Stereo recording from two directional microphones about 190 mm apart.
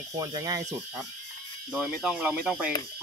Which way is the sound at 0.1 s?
20° right (ahead or behind).